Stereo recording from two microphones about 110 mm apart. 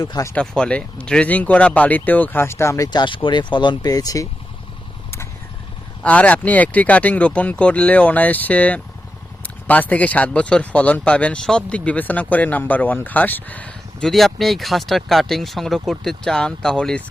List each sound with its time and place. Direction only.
0.1 s speech: 30° left (ahead or behind)
0.3 s speech: 10° left (ahead or behind); by 4.3 s 35° left (ahead or behind)
6.0 s speech: 10° left (ahead or behind)
14.1 s speech: centre (ahead or behind)